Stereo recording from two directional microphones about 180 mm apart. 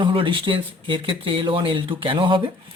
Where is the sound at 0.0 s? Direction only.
30° right (ahead or behind).